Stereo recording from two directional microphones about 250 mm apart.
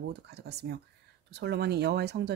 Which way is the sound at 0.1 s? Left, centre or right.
Right.